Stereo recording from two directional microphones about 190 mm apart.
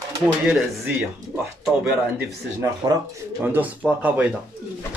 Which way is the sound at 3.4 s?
10° right (ahead or behind).